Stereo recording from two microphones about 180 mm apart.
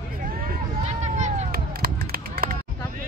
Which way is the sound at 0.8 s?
40° right (ahead or behind).